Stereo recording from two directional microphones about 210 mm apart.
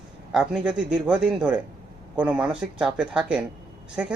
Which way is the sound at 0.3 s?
5° right (ahead or behind).